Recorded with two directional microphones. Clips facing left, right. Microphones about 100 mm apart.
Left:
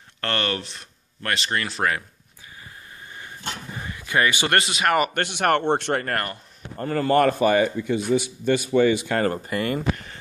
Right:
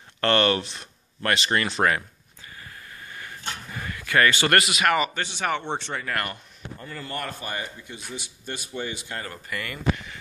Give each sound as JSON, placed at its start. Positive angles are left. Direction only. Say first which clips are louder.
{"t": 0.2, "sound": "speech", "louder": "right 5 dB", "side_deg": 0}
{"t": 2.4, "sound": "a sound", "louder": "even", "side_deg": 20}
{"t": 4.9, "sound": "speech", "louder": "left 3 dB", "side_deg": 55}
{"t": 6.1, "sound": "speech", "louder": "left 2 dB", "side_deg": 30}
{"t": 6.8, "sound": "a man's voice", "louder": "left 15 dB", "side_deg": 65}
{"t": 9.3, "sound": "speech", "louder": "left 9 dB", "side_deg": 30}
{"t": 9.8, "sound": "speech", "louder": "left 1 dB", "side_deg": 45}